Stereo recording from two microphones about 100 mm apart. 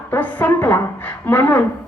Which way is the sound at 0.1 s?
20° left (ahead or behind).